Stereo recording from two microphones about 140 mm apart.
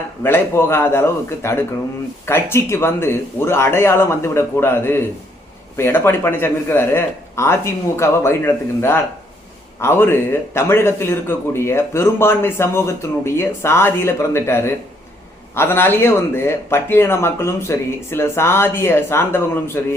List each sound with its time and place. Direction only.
0.2 s a man's voice: 15° left (ahead or behind)